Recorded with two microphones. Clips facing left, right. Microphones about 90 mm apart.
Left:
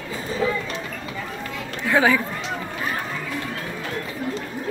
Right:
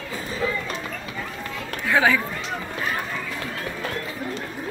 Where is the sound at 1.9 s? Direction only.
20° left (ahead or behind).